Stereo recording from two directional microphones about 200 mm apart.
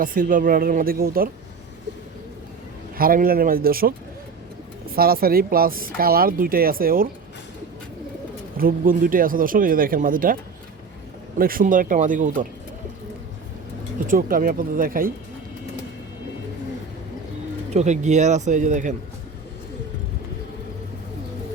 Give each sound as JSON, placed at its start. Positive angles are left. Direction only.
{"t": 0.0, "sound": "speech", "side_deg": -45}
{"t": 3.0, "sound": "speech", "side_deg": -45}
{"t": 8.5, "sound": "speech", "side_deg": -45}
{"t": 11.3, "sound": "speech", "side_deg": -45}
{"t": 14.1, "sound": "speech", "side_deg": -45}
{"t": 17.7, "sound": "speech", "side_deg": -35}